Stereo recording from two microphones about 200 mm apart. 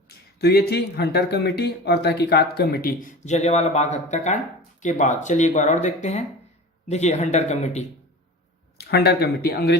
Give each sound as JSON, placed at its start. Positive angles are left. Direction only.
{"t": 0.3, "sound": "speech", "side_deg": 55}
{"t": 8.8, "sound": "speech", "side_deg": 55}